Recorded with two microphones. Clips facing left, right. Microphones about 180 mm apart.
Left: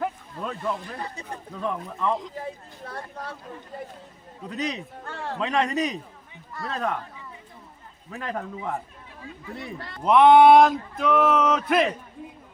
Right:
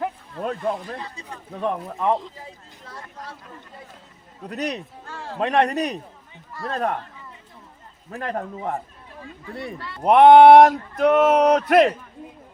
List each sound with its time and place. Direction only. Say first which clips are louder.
0.4 s speech: right 4 dB; 55° right (ahead or behind)
2.3 s speech: left 7 dB; 60° left (ahead or behind)
4.4 s speech: right 2 dB; 65° right (ahead or behind)
5.0 s speech: left 2 dB; 60° left (ahead or behind)
5.4 s speech: right 4 dB; 60° right (ahead or behind)
8.1 s speech: right 3 dB; 45° right (ahead or behind)
10.0 s speech: right 4 dB; 60° right (ahead or behind)